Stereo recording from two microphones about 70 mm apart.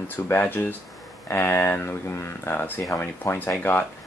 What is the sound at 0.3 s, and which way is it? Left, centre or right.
Speech, left.